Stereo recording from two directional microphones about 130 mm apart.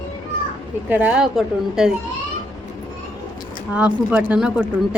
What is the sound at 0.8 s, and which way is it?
Speech, 15° right (ahead or behind).